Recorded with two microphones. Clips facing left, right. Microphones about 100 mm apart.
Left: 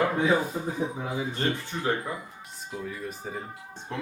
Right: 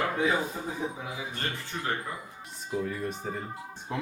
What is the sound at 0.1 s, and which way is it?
Speech, 25° left (ahead or behind).